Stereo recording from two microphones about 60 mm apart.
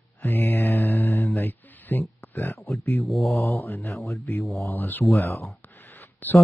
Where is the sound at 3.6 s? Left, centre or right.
Left.